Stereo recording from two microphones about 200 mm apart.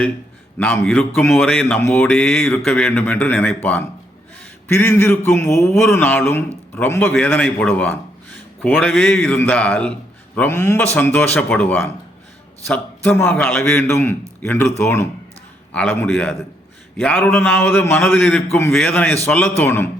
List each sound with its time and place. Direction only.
0.6 s a man's voice: 5° left (ahead or behind)